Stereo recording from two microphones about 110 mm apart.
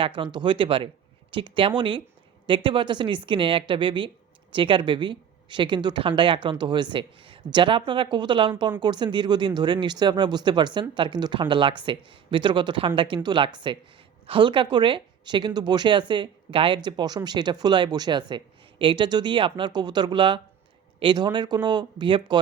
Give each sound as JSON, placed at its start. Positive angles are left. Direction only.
{"t": 0.2, "sound": "speech", "side_deg": -45}